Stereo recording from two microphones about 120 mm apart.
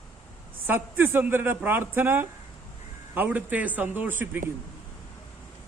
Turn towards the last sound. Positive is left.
turn(degrees=-15)  # may be behind; listen again after turning